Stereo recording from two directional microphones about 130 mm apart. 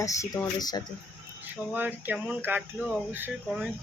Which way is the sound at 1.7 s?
15° right (ahead or behind).